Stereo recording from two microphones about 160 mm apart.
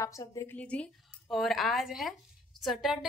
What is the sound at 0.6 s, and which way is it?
A woman's voice, 10° left (ahead or behind).